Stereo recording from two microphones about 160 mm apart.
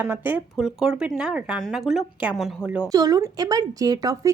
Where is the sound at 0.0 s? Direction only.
10° right (ahead or behind).